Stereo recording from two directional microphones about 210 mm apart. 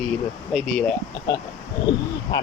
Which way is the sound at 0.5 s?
5° left (ahead or behind).